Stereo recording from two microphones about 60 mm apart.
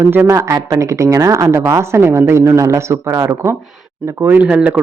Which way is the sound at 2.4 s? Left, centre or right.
Right.